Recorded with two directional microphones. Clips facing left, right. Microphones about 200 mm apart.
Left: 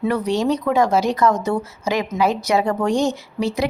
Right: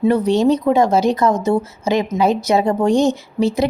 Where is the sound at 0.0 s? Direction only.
25° right (ahead or behind).